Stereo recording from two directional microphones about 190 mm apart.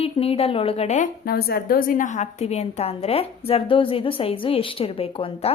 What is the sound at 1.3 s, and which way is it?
A woman's voice, 55° left (ahead or behind).